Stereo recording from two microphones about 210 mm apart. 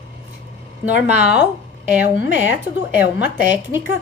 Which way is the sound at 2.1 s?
60° left (ahead or behind).